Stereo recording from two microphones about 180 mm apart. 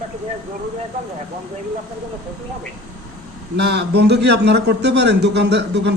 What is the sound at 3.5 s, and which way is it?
A man's voice, 65° right (ahead or behind).